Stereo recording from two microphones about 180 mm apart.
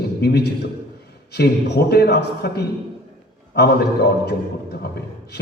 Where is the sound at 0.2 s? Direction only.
65° left (ahead or behind).